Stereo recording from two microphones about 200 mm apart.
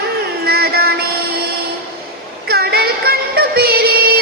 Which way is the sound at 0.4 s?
50° right (ahead or behind).